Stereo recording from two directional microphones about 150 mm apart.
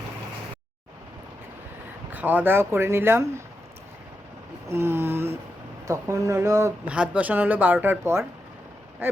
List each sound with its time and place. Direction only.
2.1 s speech: 10° right (ahead or behind)
4.7 s speech: 15° right (ahead or behind)
6.8 s speech: 10° right (ahead or behind)